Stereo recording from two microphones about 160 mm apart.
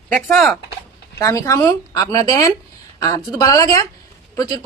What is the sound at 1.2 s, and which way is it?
A woman's voice, 20° left (ahead or behind).